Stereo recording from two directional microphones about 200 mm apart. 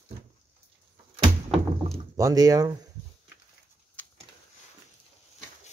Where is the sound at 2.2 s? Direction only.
15° right (ahead or behind).